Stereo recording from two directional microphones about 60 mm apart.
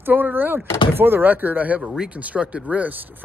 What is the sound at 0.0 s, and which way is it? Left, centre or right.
Speech, right.